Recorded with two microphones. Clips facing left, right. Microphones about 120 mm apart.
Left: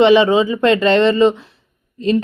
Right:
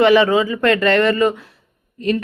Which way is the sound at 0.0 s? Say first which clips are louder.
Left 2 dB; 20° left (ahead or behind).